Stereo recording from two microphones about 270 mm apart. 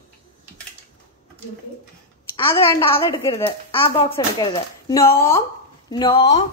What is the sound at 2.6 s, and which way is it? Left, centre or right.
Speech, centre.